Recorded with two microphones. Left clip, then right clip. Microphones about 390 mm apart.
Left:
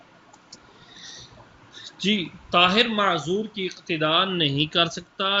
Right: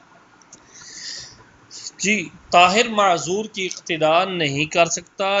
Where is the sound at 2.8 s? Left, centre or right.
Centre.